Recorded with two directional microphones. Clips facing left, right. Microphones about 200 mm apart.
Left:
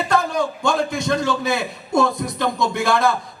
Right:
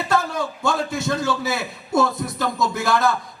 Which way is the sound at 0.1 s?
5° right (ahead or behind).